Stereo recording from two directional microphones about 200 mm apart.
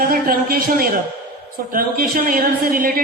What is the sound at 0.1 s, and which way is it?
A woman's voice, 45° right (ahead or behind).